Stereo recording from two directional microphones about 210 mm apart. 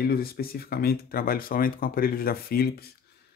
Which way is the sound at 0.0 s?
45° left (ahead or behind).